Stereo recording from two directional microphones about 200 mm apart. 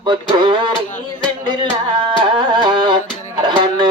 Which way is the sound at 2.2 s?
25° right (ahead or behind).